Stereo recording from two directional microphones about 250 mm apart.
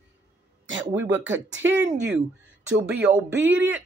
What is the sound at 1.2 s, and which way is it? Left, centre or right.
Speech, right.